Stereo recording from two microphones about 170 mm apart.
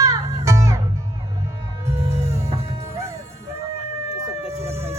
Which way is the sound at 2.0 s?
40° right (ahead or behind).